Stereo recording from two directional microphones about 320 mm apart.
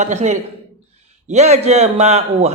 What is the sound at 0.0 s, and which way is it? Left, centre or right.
A man's voice, right.